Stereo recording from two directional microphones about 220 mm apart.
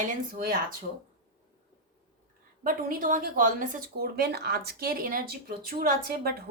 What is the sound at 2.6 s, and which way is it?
A woman's voice, 40° right (ahead or behind).